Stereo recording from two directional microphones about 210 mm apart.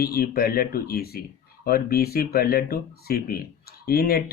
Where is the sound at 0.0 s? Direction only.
45° left (ahead or behind).